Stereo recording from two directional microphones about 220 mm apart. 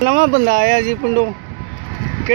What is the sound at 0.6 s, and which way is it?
Speech, 50° right (ahead or behind).